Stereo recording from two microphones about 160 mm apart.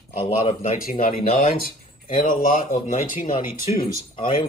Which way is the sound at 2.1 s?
60° left (ahead or behind).